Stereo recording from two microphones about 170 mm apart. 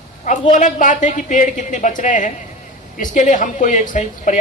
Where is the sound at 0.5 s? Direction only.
45° left (ahead or behind).